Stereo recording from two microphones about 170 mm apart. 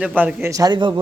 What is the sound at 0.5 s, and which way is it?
Speech, 25° right (ahead or behind).